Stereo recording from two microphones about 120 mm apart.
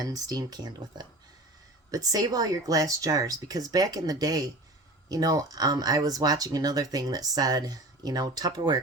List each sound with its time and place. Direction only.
0.0 s speech: 30° right (ahead or behind)